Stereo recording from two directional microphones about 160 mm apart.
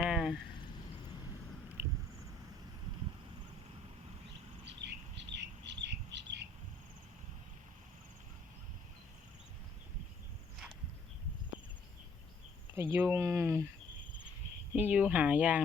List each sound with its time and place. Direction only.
0.0 s a sound: 5° right (ahead or behind)
4.6 s bird: 90° right
12.7 s speech: 15° right (ahead or behind)
14.8 s speech: 10° right (ahead or behind)